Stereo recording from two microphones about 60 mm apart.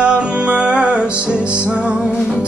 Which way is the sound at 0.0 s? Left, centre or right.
Right.